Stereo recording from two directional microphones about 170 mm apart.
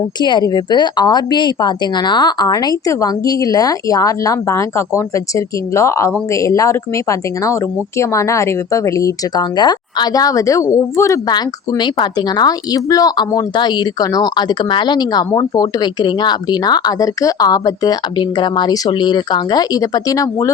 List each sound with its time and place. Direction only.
0.2 s speech: 25° left (ahead or behind)